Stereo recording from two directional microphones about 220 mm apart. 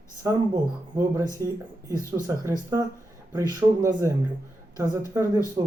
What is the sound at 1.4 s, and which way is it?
Speech, 15° right (ahead or behind).